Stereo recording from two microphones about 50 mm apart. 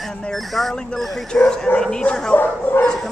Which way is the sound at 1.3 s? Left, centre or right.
Centre.